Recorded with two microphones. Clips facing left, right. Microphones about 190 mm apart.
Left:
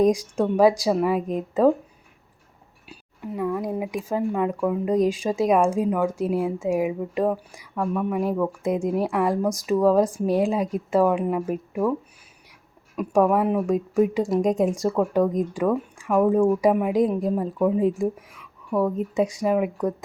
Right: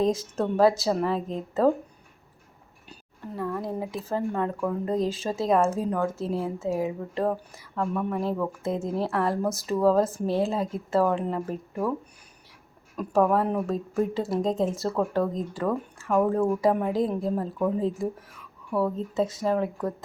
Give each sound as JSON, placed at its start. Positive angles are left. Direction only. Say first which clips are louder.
{"t": 0.0, "sound": "speech", "louder": "left 5 dB", "side_deg": 15}
{"t": 2.9, "sound": "speech", "louder": "left 5 dB", "side_deg": 10}
{"t": 13.0, "sound": "speech", "louder": "left 3 dB", "side_deg": 10}